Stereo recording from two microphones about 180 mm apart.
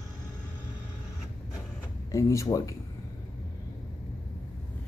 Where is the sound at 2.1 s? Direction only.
15° left (ahead or behind).